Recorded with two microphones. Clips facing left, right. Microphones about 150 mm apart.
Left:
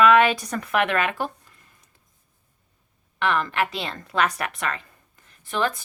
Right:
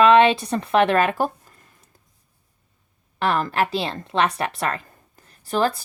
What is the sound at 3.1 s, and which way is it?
A woman's voice, 35° right (ahead or behind).